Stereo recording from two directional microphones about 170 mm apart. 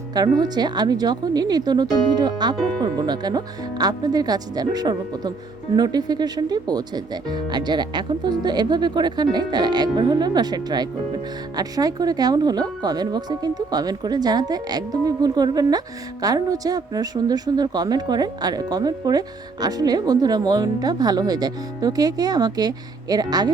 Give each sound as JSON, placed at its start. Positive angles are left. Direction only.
{"t": 0.1, "sound": "a woman's voice", "side_deg": -25}